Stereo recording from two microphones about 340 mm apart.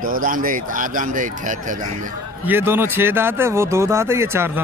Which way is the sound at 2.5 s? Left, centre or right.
Centre.